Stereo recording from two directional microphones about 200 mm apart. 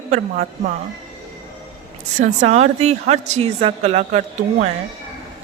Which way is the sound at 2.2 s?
35° right (ahead or behind).